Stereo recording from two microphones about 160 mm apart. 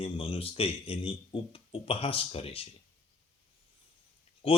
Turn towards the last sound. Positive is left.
turn(degrees=35)  # may be behind; listen again after turning